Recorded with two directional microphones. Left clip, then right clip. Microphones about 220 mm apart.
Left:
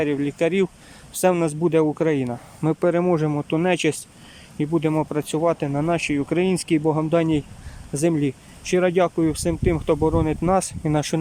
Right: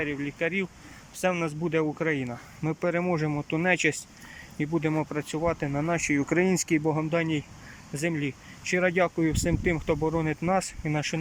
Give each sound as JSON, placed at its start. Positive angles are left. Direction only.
{"t": 0.0, "sound": "speech", "side_deg": 20}